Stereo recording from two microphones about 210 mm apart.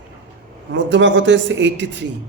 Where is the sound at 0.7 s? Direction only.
60° right (ahead or behind).